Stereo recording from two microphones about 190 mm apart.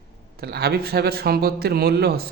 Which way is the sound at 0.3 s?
55° right (ahead or behind).